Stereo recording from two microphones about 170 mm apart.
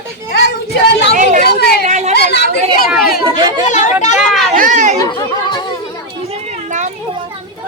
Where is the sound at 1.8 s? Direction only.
40° right (ahead or behind).